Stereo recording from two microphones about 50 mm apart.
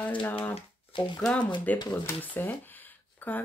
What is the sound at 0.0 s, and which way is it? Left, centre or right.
Speech, left.